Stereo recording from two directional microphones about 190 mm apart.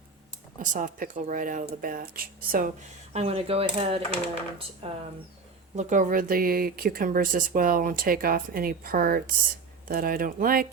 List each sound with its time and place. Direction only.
0.6 s speech: 45° right (ahead or behind)
3.1 s speech: 35° right (ahead or behind)
5.7 s speech: 40° right (ahead or behind)